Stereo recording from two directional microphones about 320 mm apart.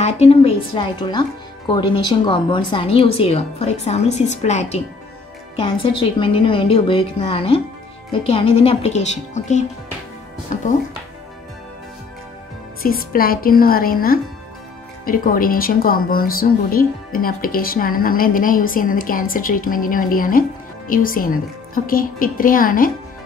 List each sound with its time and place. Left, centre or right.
0.0 s a woman's voice: centre
12.8 s a woman's voice: left